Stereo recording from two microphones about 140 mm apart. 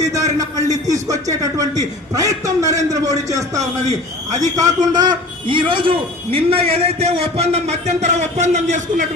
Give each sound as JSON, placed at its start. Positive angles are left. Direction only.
{"t": 0.0, "sound": "a sound", "side_deg": -25}
{"t": 1.0, "sound": "speech", "side_deg": -25}
{"t": 4.3, "sound": "a man's voice", "side_deg": -60}
{"t": 4.5, "sound": "a man's voice", "side_deg": -30}